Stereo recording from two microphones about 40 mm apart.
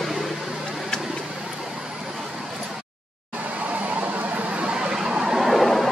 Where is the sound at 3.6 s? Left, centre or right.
Right.